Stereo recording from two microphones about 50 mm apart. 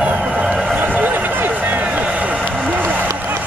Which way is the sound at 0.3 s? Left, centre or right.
Centre.